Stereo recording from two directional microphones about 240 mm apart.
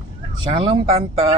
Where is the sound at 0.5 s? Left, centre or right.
Right.